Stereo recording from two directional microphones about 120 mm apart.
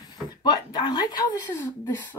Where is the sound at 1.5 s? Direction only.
20° left (ahead or behind).